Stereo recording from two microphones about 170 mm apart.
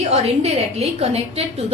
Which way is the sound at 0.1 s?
35° right (ahead or behind).